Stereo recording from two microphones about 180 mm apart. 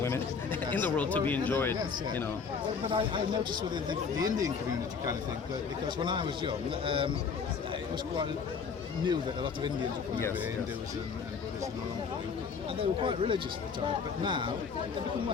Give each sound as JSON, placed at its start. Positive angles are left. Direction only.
{"t": 0.0, "sound": "a sound", "side_deg": 15}
{"t": 1.3, "sound": "speech", "side_deg": 10}
{"t": 2.8, "sound": "speech", "side_deg": -30}
{"t": 6.0, "sound": "speech", "side_deg": -25}
{"t": 9.0, "sound": "speech", "side_deg": -25}
{"t": 12.8, "sound": "speech", "side_deg": -30}